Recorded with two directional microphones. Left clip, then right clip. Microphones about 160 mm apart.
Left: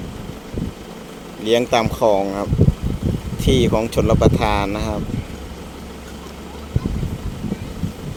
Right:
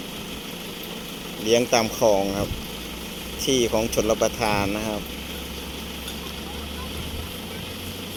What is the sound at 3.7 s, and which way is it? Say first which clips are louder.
Speech: left 4 dB; 10° left (ahead or behind).